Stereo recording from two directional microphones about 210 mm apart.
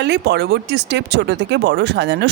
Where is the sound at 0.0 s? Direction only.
55° right (ahead or behind).